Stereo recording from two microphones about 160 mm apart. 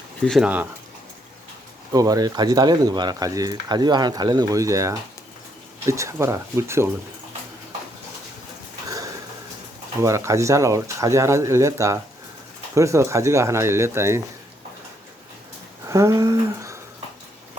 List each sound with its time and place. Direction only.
0.2 s speech: centre (ahead or behind)
0.4 s speech: 10° right (ahead or behind)
1.9 s speech: 25° right (ahead or behind)
10.0 s speech: 20° right (ahead or behind)
15.9 s speech: 20° right (ahead or behind)